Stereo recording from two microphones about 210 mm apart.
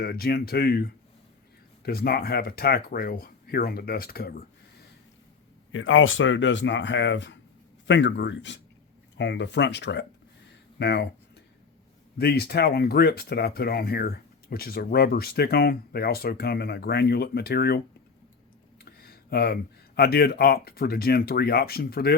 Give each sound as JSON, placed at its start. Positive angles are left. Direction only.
{"t": 0.0, "sound": "speech", "side_deg": 45}
{"t": 5.7, "sound": "speech", "side_deg": 70}
{"t": 12.1, "sound": "speech", "side_deg": 50}
{"t": 18.8, "sound": "a sound", "side_deg": 45}
{"t": 20.0, "sound": "speech", "side_deg": 50}